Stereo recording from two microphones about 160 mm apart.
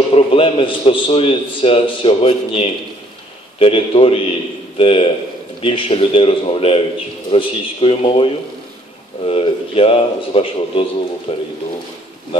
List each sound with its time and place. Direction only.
0.1 s a man's voice: 35° left (ahead or behind)
9.3 s a man's voice: 35° left (ahead or behind)